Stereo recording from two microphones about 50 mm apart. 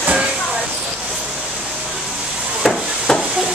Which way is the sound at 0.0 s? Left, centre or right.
Right.